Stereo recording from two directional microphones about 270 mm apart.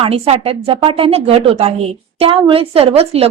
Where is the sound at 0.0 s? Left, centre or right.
Right.